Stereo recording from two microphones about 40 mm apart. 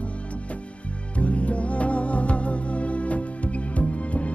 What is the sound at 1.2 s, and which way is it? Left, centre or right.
Music, left.